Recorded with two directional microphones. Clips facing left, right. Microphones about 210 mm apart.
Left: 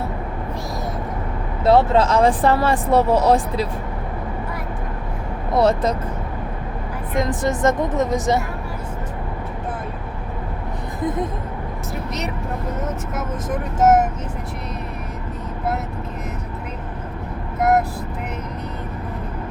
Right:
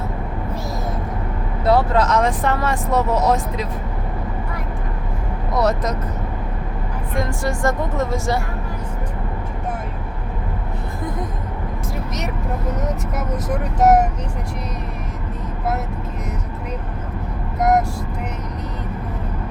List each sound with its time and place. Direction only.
1.6 s speech: 25° left (ahead or behind)
5.5 s speech: 30° left (ahead or behind)
7.2 s speech: 20° left (ahead or behind)
17.6 s vehicle: 5° left (ahead or behind)